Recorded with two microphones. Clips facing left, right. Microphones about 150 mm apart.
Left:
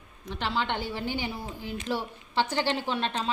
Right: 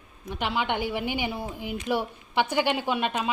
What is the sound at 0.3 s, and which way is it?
A woman's voice, 10° right (ahead or behind).